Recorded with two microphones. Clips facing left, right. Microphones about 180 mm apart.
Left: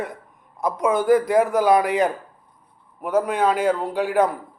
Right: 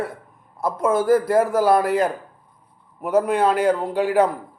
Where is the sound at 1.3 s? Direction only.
15° left (ahead or behind).